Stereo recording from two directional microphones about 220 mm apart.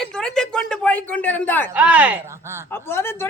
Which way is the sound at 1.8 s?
5° right (ahead or behind).